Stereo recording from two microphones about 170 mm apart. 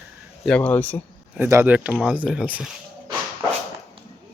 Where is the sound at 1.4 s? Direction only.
15° right (ahead or behind).